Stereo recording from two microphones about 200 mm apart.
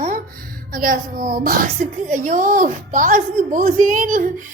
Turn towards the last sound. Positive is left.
turn(degrees=-40)  # may be behind; listen again after turning